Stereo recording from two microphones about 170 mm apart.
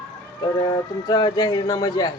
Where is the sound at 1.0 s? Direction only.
25° left (ahead or behind).